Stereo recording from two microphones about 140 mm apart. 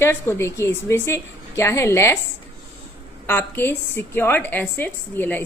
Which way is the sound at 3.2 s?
15° left (ahead or behind).